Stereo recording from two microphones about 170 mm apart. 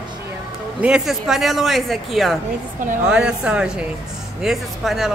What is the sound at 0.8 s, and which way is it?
Speech, 5° right (ahead or behind).